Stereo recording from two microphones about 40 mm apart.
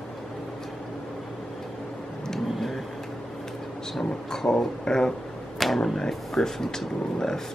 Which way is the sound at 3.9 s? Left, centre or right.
Centre.